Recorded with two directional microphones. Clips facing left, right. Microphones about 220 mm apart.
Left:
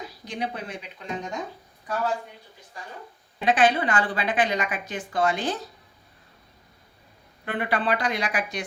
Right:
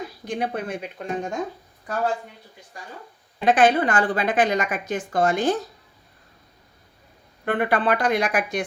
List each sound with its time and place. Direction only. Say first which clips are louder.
0.3 s a woman's voice: right 5 dB; 50° right (ahead or behind)
3.4 s a woman's voice: right 3 dB; 45° right (ahead or behind)
7.4 s a woman's voice: right 5 dB; 50° right (ahead or behind)